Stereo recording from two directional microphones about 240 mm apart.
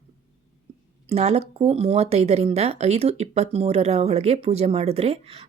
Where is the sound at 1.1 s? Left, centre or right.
Right.